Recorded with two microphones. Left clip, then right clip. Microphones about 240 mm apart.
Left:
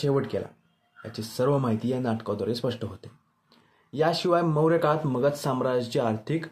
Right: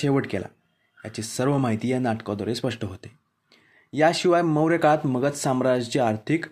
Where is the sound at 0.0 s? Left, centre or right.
Right.